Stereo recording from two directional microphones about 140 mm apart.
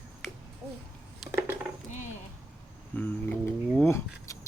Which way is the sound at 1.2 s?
Centre (ahead or behind).